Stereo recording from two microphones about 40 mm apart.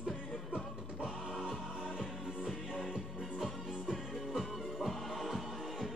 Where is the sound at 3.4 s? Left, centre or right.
Centre.